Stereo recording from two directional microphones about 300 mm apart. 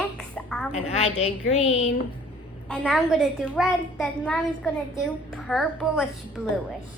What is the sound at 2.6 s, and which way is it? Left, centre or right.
A child's voice, centre.